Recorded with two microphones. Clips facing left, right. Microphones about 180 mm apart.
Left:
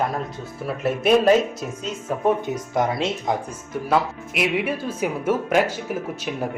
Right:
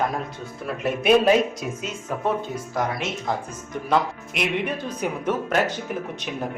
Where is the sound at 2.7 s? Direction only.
20° left (ahead or behind).